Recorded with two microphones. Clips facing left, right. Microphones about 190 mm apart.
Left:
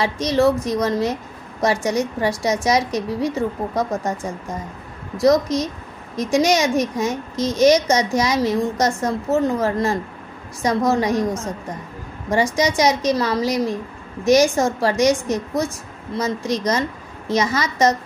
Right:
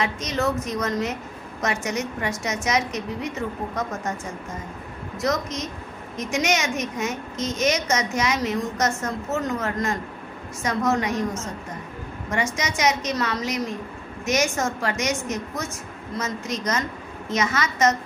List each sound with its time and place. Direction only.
0.0 s a woman's voice: 35° left (ahead or behind)
12.5 s a woman's voice: 35° left (ahead or behind)